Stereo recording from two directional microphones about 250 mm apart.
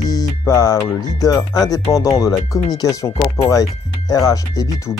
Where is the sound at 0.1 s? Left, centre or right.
Centre.